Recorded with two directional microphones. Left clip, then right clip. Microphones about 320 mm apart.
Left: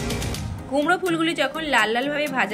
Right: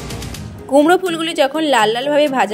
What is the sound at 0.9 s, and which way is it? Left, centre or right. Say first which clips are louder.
A woman's voice: right 6 dB; centre.